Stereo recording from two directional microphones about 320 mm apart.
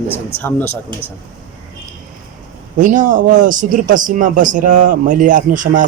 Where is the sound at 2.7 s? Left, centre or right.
Right.